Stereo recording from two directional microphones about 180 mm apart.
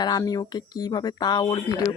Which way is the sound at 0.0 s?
20° left (ahead or behind).